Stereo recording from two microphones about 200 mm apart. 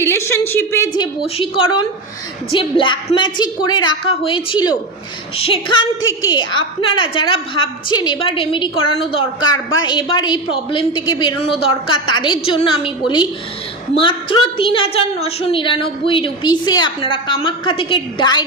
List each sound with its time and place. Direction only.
0.1 s a woman's voice: 10° left (ahead or behind)
1.2 s a woman's voice: 25° left (ahead or behind)